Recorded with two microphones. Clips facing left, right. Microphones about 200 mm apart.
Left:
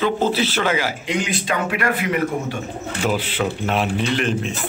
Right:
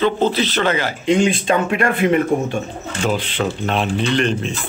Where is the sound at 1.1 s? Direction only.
25° right (ahead or behind).